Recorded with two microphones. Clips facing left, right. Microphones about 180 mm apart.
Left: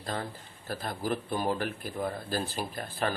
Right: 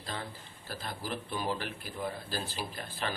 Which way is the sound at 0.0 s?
50° left (ahead or behind).